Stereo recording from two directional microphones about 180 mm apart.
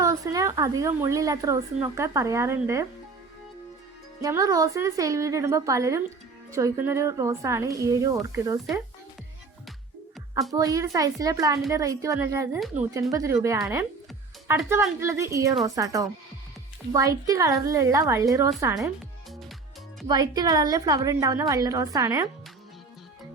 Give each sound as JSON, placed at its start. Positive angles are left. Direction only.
{"t": 0.0, "sound": "a woman's voice", "side_deg": -20}
{"t": 4.2, "sound": "speech", "side_deg": -20}
{"t": 10.5, "sound": "a woman's voice", "side_deg": -20}
{"t": 12.5, "sound": "speech", "side_deg": 0}
{"t": 12.9, "sound": "a woman's voice", "side_deg": -20}
{"t": 20.1, "sound": "a woman's voice", "side_deg": -20}